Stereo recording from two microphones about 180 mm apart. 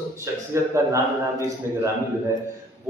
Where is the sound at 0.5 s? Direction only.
15° right (ahead or behind).